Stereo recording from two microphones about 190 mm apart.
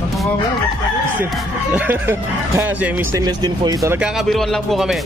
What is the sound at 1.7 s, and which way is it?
Speech, 10° right (ahead or behind).